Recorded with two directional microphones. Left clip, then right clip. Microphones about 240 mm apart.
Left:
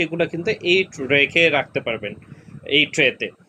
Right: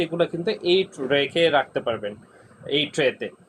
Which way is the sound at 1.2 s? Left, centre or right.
Left.